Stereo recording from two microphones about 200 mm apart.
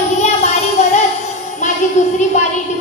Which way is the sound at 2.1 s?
35° left (ahead or behind).